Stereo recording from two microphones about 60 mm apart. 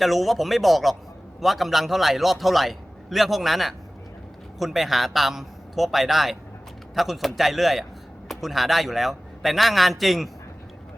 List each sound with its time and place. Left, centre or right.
0.0 s a man's voice: centre